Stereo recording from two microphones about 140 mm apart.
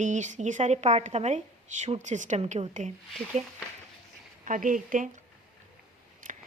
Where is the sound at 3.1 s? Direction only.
Centre (ahead or behind).